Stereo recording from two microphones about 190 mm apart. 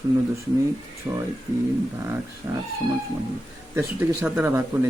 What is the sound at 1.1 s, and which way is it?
Speech, 15° right (ahead or behind).